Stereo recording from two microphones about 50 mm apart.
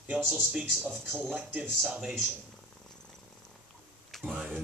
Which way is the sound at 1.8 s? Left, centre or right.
Centre.